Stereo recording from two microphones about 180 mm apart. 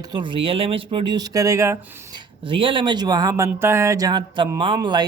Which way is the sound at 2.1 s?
30° right (ahead or behind).